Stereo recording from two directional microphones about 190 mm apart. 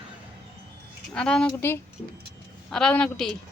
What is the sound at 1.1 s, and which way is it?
A woman's voice, 5° left (ahead or behind).